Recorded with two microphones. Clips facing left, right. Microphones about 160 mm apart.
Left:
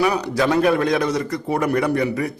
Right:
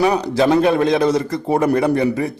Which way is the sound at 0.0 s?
30° right (ahead or behind).